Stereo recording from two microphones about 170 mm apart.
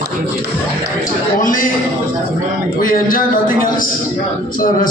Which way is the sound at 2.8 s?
55° left (ahead or behind).